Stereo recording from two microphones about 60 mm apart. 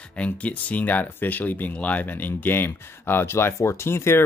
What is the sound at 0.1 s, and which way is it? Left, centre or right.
Speech, left.